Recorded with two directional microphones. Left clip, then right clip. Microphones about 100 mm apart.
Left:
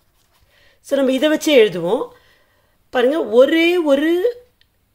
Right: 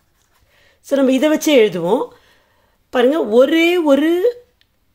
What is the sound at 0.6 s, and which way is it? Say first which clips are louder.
A woman's voice: right 2 dB; 20° right (ahead or behind).